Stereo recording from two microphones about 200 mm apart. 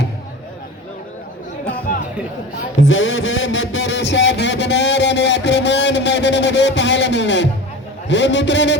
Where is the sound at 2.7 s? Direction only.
70° left (ahead or behind).